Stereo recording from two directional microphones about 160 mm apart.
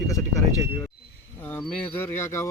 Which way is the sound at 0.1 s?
20° left (ahead or behind).